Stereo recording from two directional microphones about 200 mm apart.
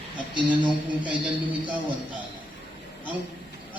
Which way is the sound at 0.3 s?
25° right (ahead or behind).